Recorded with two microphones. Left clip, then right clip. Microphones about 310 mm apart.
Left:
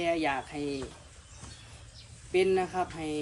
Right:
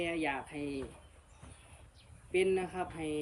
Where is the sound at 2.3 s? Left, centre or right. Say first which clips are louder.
Left 5 dB; centre.